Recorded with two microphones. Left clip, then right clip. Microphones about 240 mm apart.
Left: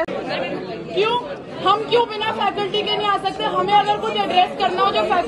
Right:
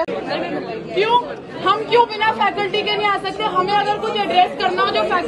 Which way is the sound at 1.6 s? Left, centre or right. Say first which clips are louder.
Right 2 dB; centre.